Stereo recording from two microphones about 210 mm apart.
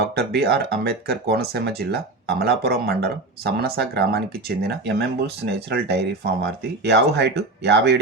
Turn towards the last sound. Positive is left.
turn(degrees=-55)  # may be behind; listen again after turning